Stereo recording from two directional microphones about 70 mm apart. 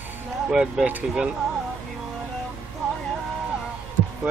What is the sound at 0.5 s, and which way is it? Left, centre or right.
Speech, centre.